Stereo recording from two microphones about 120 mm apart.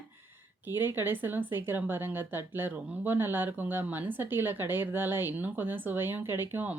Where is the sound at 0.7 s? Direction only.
20° right (ahead or behind).